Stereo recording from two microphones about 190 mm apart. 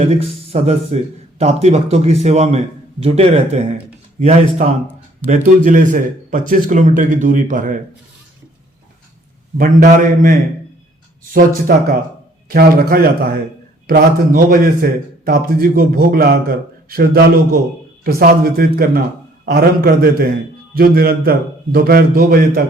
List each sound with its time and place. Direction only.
0.2 s a man's voice: 30° right (ahead or behind)
9.6 s a man's voice: 45° right (ahead or behind)
11.2 s a sound: 45° right (ahead or behind)
12.5 s a man's voice: 50° right (ahead or behind)